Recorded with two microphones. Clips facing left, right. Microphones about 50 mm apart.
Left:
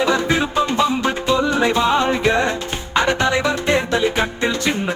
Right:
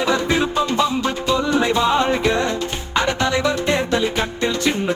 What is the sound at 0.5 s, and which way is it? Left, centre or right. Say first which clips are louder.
Music: left 1 dB; left.